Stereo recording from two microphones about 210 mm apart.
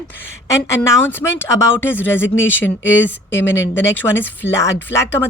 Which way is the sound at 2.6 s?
60° left (ahead or behind).